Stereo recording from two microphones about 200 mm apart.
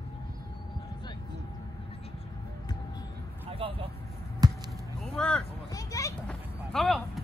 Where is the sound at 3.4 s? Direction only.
30° right (ahead or behind).